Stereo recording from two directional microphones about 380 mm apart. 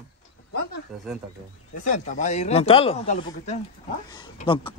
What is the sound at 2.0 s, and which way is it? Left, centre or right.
Speech, centre.